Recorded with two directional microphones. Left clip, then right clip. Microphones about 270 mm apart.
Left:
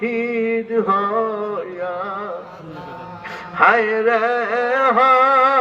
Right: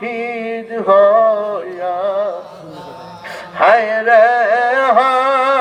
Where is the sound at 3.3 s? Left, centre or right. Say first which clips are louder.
Right 3 dB; right.